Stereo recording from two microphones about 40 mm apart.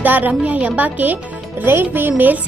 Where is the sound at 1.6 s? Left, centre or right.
Right.